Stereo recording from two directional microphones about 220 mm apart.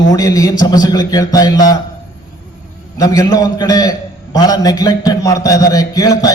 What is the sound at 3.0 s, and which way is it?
A man's voice, 15° left (ahead or behind).